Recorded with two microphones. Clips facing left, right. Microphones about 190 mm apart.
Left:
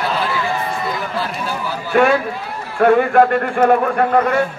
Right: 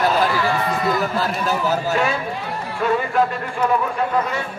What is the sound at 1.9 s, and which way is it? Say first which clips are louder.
A man's voice: left 7 dB; 60° left (ahead or behind).